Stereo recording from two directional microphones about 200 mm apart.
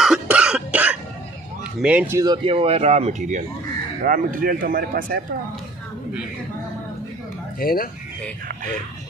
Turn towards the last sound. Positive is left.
turn(degrees=45)  # may be behind; listen again after turning